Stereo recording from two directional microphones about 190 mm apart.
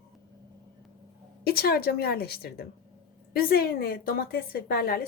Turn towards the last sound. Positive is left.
turn(degrees=55)  # may be behind; listen again after turning